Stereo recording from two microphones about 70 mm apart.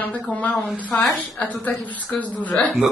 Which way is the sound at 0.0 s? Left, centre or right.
Left.